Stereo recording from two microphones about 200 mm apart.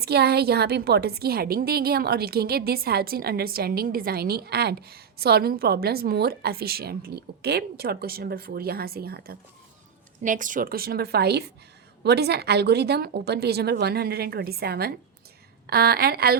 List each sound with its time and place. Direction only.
0.0 s a woman's voice: 55° right (ahead or behind)